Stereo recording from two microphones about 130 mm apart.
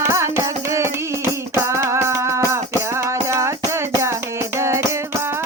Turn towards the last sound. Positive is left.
turn(degrees=-20)  # may be behind; listen again after turning